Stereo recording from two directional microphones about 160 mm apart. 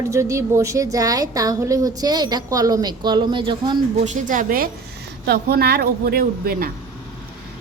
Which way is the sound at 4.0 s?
50° right (ahead or behind).